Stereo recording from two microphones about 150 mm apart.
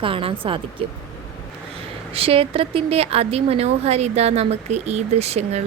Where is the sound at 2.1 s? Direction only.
40° right (ahead or behind).